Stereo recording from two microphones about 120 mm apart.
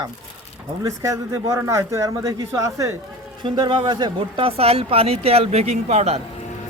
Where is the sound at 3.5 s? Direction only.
40° right (ahead or behind); by 6.2 s 65° right (ahead or behind).